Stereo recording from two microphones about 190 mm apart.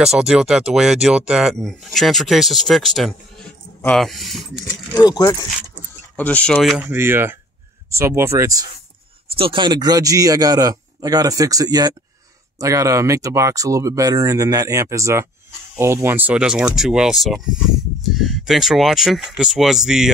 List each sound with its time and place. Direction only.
0.0 s speech: 5° right (ahead or behind)
4.9 s speech: 20° left (ahead or behind); by 6.8 s 5° left (ahead or behind)
6.8 s a man's voice: 10° right (ahead or behind)